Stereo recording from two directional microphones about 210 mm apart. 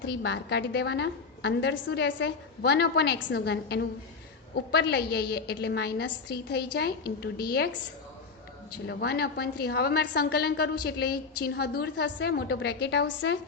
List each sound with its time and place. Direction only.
0.0 s a woman's voice: 55° left (ahead or behind)
8.9 s a woman's voice: 50° left (ahead or behind)